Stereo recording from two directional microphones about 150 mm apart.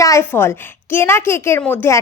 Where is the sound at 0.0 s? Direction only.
20° left (ahead or behind).